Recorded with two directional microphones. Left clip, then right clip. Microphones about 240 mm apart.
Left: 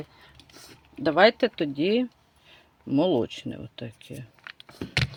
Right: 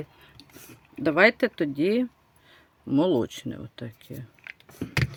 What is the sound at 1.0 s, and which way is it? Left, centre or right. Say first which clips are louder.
Speech: left 1 dB; right.